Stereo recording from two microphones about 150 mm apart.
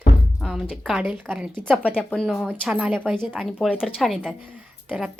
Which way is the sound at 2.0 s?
10° left (ahead or behind).